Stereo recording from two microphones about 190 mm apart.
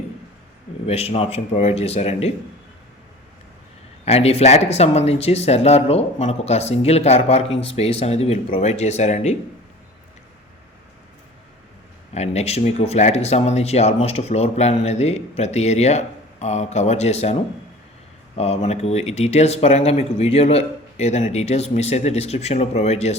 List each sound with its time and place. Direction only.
0.9 s speech: 30° left (ahead or behind)
4.0 s speech: 35° left (ahead or behind)
12.1 s speech: 35° left (ahead or behind)
18.3 s speech: 35° left (ahead or behind)